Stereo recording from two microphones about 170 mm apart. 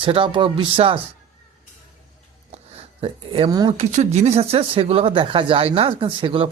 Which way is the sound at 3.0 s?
35° right (ahead or behind).